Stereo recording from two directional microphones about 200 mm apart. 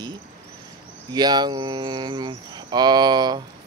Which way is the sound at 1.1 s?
20° right (ahead or behind).